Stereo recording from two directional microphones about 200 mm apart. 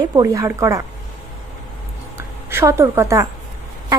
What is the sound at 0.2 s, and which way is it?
Speech, 15° right (ahead or behind).